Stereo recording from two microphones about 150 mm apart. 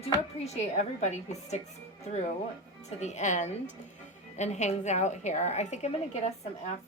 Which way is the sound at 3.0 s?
50° left (ahead or behind).